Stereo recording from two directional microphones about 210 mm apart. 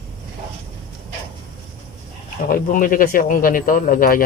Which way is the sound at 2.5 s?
40° left (ahead or behind).